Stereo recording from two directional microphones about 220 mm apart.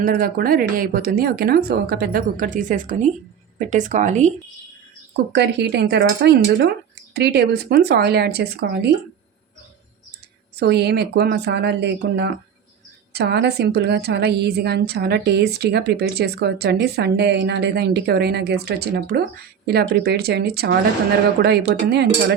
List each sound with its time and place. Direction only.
0.0 s speech: 40° right (ahead or behind)
5.3 s a woman's voice: 50° right (ahead or behind)
10.6 s a woman's voice: 50° right (ahead or behind)
21.8 s a woman's voice: 50° right (ahead or behind)